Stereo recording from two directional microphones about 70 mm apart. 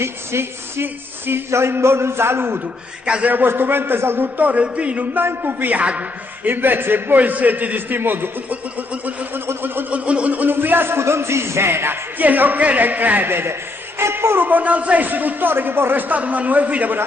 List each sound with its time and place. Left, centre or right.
0.0 s a man's voice: right
3.1 s a man's voice: centre
3.3 s a man's voice: right
9.5 s a sound: right
9.9 s a sound: centre; by 11.9 s right
12.2 s a man's voice: right